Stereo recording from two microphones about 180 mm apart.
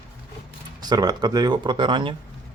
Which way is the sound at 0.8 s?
20° right (ahead or behind).